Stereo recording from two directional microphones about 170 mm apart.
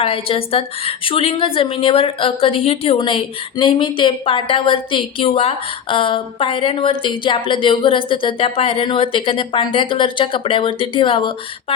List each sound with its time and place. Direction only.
0.0 s a woman's voice: 35° left (ahead or behind)